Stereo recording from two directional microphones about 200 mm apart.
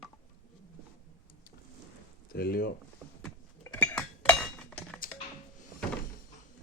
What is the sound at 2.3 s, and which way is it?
Speech, 50° left (ahead or behind).